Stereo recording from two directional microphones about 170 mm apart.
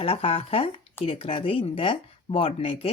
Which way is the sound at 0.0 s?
35° left (ahead or behind).